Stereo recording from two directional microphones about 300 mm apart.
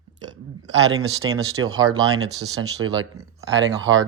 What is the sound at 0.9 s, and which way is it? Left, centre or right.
Speech, right.